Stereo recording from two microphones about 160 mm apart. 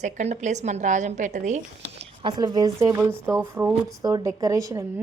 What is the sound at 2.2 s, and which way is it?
A woman's voice, 25° right (ahead or behind).